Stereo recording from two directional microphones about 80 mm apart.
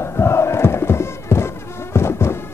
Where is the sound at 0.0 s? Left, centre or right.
Left.